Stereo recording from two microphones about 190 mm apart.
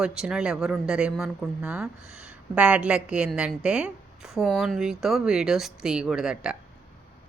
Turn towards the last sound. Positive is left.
turn(degrees=-5)  # may be behind; listen again after turning